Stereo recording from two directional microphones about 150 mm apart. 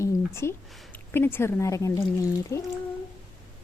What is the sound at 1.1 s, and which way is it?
Speech, 15° left (ahead or behind).